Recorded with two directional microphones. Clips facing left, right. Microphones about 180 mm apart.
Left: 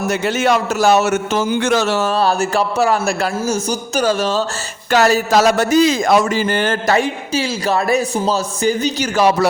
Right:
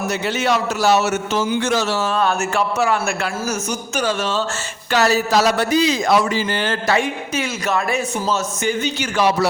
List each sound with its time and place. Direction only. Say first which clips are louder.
0.1 s speech: left 4 dB; 50° left (ahead or behind)
2.1 s a man's voice: left 3 dB; 35° left (ahead or behind)